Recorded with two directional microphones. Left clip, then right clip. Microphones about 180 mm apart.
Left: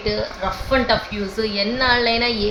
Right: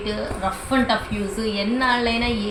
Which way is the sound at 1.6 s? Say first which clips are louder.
Left 3 dB; 25° left (ahead or behind).